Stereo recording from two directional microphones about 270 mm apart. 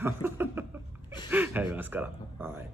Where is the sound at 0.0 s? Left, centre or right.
Centre.